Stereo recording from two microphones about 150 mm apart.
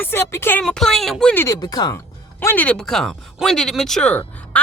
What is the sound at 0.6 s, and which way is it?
Speech, 5° left (ahead or behind).